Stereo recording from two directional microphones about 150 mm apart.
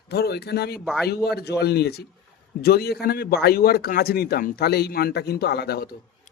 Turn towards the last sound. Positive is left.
turn(degrees=90)